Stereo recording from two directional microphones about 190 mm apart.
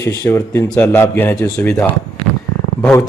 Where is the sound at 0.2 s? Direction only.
15° left (ahead or behind).